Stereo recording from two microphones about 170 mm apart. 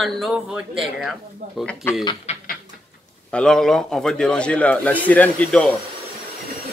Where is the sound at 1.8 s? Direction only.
15° left (ahead or behind).